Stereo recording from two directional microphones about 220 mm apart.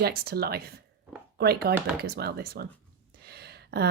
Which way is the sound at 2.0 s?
45° right (ahead or behind).